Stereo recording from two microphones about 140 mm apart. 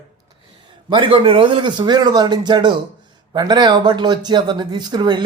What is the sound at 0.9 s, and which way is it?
Speech, 40° right (ahead or behind).